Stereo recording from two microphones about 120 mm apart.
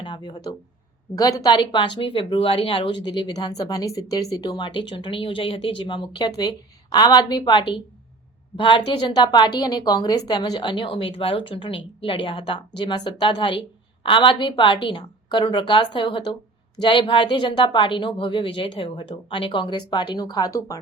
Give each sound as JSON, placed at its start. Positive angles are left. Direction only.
{"t": 0.0, "sound": "a woman's voice", "side_deg": 40}